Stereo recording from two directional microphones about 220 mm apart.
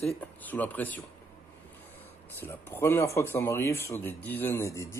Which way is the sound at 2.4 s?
10° left (ahead or behind).